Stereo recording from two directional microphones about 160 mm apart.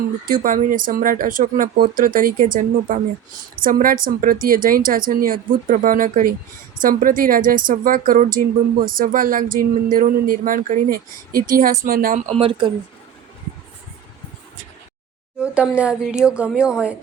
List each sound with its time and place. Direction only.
0.3 s speech: 55° right (ahead or behind)
15.4 s speech: 5° right (ahead or behind)